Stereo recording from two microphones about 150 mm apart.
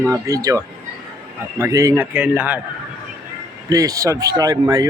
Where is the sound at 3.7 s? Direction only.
25° right (ahead or behind).